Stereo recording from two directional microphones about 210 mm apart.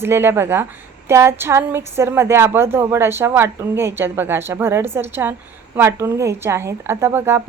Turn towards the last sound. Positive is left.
turn(degrees=-10)  # may be behind; listen again after turning